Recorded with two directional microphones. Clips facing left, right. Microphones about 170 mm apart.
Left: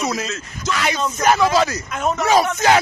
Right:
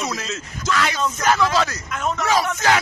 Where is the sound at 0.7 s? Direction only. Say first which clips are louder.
Even; 20° left (ahead or behind).